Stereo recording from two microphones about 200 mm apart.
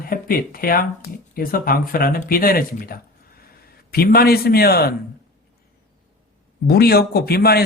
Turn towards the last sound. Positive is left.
turn(degrees=50)  # may be behind; listen again after turning